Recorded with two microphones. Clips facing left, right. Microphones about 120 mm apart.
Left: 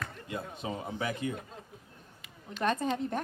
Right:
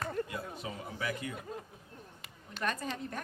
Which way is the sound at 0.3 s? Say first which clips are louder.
Left 3 dB; 25° left (ahead or behind).